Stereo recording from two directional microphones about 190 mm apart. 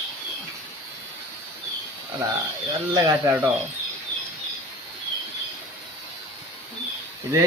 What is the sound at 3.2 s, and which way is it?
Speech, 10° right (ahead or behind).